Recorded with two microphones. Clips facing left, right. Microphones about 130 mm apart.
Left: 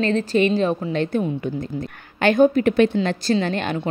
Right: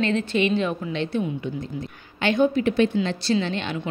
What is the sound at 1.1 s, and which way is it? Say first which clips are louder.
A woman's voice: left 3 dB; 50° left (ahead or behind).